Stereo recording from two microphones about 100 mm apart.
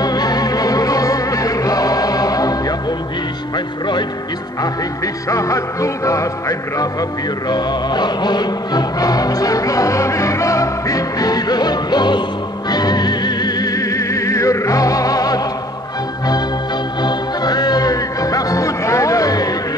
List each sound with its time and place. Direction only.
0.0 s music: 40° left (ahead or behind)
4.6 s music: 35° left (ahead or behind)
17.0 s music: 45° left (ahead or behind)